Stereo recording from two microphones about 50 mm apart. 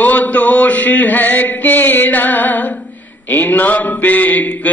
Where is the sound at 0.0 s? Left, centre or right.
Left.